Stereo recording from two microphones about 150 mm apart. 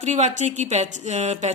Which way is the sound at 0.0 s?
50° right (ahead or behind).